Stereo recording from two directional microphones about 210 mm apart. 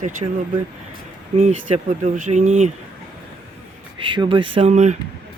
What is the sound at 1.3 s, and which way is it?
Speech, 35° right (ahead or behind).